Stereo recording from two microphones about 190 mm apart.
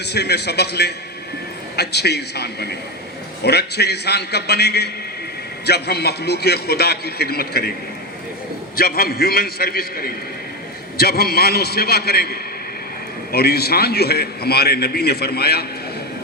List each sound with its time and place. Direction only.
0.0 s a man's voice: 60° left (ahead or behind)
8.7 s a man's voice: 55° left (ahead or behind)